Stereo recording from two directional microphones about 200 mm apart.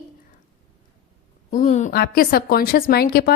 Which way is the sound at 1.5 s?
40° left (ahead or behind).